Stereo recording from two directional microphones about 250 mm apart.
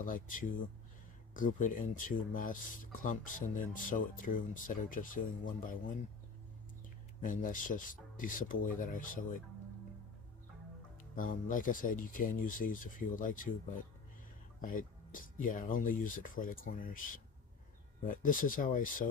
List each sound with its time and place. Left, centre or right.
0.0 s speech: left
7.2 s speech: left
11.1 s speech: left
14.6 s speech: left
18.0 s speech: left